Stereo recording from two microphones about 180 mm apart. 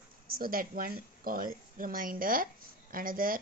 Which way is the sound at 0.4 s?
50° right (ahead or behind).